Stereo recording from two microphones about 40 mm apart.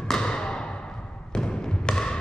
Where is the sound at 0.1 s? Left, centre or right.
Left.